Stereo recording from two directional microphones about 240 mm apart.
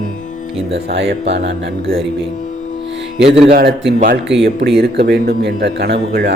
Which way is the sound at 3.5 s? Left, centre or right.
Right.